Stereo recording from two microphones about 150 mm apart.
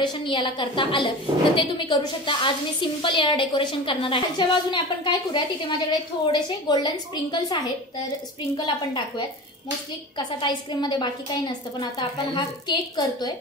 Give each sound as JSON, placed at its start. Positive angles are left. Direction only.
{"t": 0.0, "sound": "a woman's voice", "side_deg": 30}
{"t": 10.1, "sound": "a woman's voice", "side_deg": 30}